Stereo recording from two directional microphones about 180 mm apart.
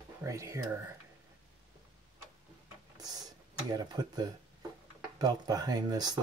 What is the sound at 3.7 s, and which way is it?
Speech, 20° right (ahead or behind).